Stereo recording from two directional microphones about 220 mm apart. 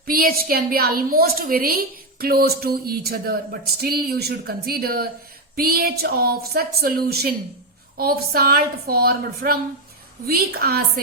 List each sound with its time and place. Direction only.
0.0 s a woman's voice: 40° right (ahead or behind)